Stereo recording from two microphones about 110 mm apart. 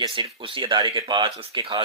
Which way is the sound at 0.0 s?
45° right (ahead or behind).